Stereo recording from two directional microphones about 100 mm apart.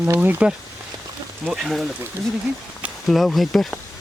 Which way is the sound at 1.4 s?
Centre (ahead or behind).